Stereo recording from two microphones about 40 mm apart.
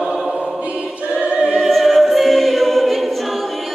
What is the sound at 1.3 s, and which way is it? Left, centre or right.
Opera, right.